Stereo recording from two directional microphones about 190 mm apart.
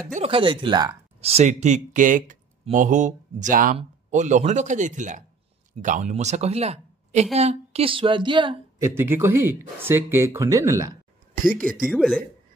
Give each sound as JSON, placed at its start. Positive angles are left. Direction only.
{"t": 0.1, "sound": "a woman's voice", "side_deg": -30}
{"t": 8.8, "sound": "speech", "side_deg": -10}
{"t": 11.4, "sound": "speech", "side_deg": -45}
{"t": 11.8, "sound": "speech", "side_deg": 0}